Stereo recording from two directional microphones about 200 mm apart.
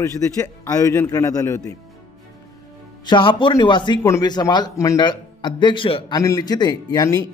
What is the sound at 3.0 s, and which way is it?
A man's voice, 25° left (ahead or behind).